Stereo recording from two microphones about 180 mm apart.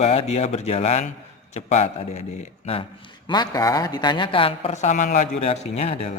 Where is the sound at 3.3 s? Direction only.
20° left (ahead or behind).